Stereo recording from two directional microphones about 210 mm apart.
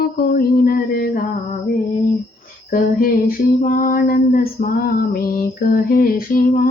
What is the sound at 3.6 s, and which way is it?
Female singing, 40° left (ahead or behind).